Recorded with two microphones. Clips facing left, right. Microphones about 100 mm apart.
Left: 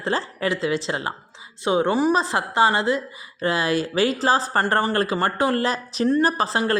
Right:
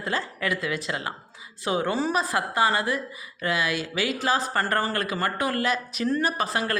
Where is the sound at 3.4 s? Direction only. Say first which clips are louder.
Left 5 dB; 35° left (ahead or behind).